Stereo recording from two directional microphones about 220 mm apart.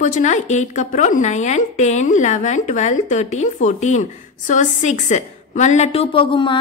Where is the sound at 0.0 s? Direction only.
35° left (ahead or behind).